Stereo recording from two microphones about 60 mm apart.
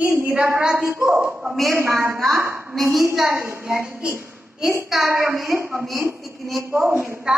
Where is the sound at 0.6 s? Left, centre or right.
Centre.